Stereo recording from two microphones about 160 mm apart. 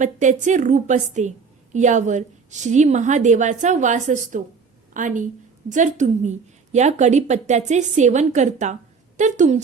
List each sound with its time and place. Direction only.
0.0 s a woman's voice: 50° right (ahead or behind)